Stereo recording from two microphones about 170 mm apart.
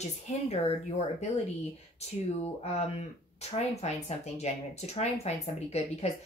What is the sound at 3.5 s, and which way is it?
Speech, 40° left (ahead or behind).